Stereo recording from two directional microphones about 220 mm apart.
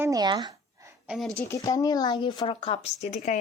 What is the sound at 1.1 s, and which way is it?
Speech, centre (ahead or behind).